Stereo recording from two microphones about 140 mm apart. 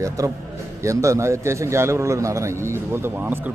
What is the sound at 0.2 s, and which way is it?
A man's voice, 25° right (ahead or behind).